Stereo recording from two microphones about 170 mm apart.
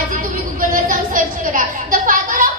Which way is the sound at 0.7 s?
50° right (ahead or behind).